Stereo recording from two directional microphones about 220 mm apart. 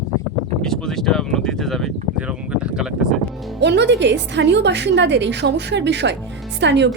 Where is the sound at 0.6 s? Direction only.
Centre (ahead or behind).